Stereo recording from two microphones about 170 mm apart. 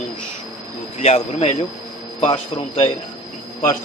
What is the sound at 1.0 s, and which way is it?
Speech, 35° left (ahead or behind).